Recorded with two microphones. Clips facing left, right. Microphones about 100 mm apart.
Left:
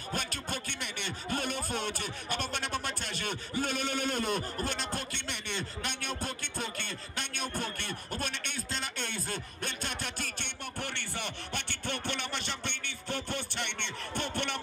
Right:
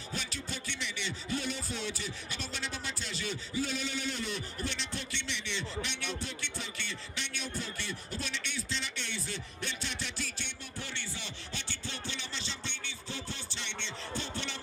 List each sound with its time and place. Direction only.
0.1 s music: 50° left (ahead or behind)